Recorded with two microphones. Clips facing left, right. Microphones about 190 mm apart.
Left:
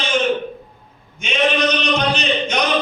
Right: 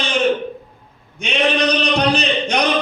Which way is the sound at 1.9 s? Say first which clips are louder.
Right 2 dB; 35° right (ahead or behind).